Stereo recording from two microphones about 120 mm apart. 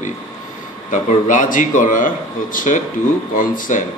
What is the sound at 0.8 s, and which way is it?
A man's voice, 90° left.